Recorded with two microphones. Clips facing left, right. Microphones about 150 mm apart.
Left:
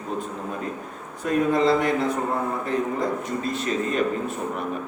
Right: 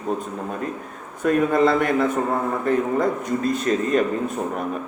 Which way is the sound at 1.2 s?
55° right (ahead or behind).